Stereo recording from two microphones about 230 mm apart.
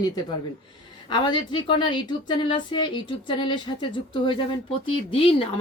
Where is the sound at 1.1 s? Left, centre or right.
Centre.